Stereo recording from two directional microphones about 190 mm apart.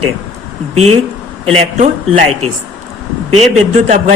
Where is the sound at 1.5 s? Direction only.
35° right (ahead or behind).